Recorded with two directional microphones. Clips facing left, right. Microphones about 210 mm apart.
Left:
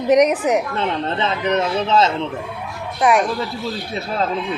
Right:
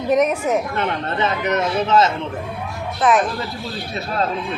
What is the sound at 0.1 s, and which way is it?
Speech, 15° left (ahead or behind).